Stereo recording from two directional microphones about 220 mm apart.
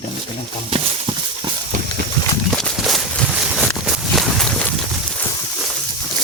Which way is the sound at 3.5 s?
Centre (ahead or behind).